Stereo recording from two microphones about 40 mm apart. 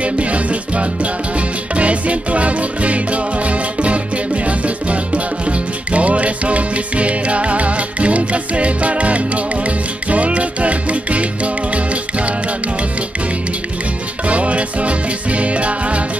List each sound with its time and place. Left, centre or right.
0.0 s music: right
14.2 s music: right